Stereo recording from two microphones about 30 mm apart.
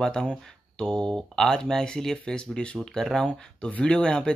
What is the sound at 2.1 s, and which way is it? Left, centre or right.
Speech, left.